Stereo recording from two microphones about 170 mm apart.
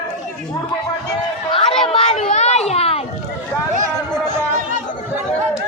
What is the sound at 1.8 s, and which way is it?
Children playing, 35° left (ahead or behind).